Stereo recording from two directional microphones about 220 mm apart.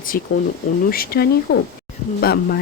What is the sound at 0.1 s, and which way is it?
Speech, 40° left (ahead or behind).